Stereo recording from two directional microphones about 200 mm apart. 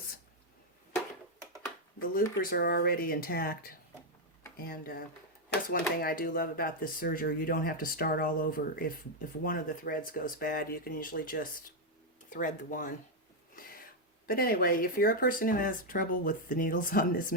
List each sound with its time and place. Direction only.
2.4 s speech: 50° left (ahead or behind)
13.6 s a sound: 45° left (ahead or behind)
14.3 s speech: 45° left (ahead or behind)